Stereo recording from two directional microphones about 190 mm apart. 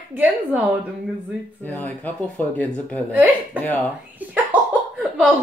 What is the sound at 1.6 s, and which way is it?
Speech, 10° left (ahead or behind).